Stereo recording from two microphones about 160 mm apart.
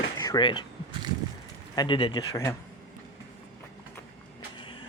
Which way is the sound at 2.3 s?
20° left (ahead or behind).